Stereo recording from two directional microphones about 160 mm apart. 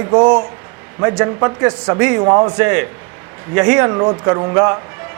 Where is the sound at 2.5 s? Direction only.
10° right (ahead or behind).